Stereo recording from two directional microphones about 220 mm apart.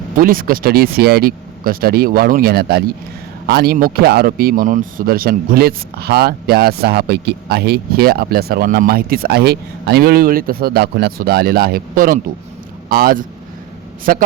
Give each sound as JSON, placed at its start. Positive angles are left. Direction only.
{"t": 0.2, "sound": "speech", "side_deg": -40}